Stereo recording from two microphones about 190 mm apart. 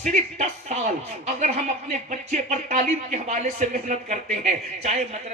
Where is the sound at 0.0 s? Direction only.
40° right (ahead or behind).